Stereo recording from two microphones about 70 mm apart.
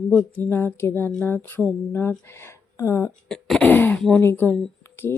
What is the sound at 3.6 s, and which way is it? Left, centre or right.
Throat clearing, left.